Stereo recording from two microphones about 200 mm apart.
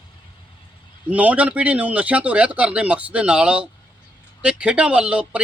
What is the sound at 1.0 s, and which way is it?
A man's voice, 5° right (ahead or behind).